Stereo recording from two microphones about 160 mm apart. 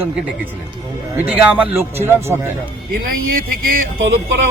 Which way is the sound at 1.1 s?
10° right (ahead or behind).